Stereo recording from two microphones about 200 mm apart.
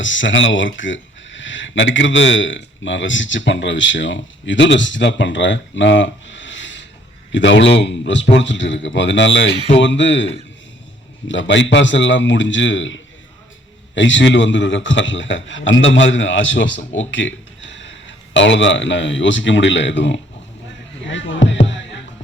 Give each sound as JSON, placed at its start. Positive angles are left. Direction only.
{"t": 0.0, "sound": "a man's voice", "side_deg": 70}
{"t": 21.1, "sound": "music", "side_deg": 70}